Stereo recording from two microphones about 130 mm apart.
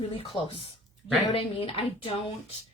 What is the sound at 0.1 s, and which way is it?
A woman's voice, 45° left (ahead or behind).